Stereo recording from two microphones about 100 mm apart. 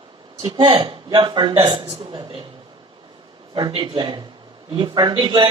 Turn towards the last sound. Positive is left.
turn(degrees=-50)  # may be behind; listen again after turning